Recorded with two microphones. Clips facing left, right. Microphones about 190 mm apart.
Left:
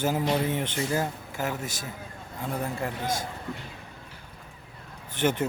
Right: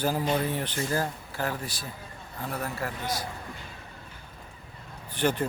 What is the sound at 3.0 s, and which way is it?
Speech, 50° left (ahead or behind).